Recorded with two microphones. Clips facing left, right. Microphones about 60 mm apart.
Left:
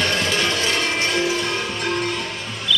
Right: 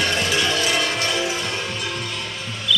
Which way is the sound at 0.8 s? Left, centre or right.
Left.